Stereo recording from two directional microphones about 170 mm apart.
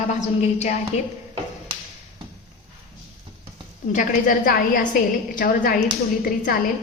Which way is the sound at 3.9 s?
50° left (ahead or behind).